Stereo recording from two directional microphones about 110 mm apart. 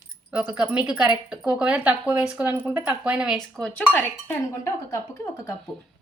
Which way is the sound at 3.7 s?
15° left (ahead or behind).